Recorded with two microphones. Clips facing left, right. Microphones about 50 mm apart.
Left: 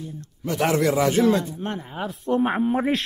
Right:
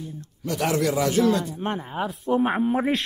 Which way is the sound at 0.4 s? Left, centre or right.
Left.